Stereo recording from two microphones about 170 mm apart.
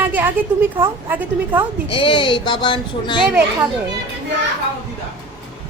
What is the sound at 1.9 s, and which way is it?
Speech, 30° left (ahead or behind).